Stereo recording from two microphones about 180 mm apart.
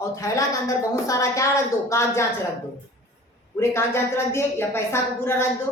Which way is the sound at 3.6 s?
15° left (ahead or behind).